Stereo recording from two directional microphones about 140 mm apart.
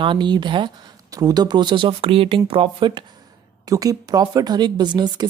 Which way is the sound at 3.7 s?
25° right (ahead or behind).